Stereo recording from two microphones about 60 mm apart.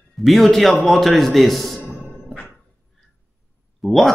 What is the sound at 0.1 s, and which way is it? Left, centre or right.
A man's voice, centre.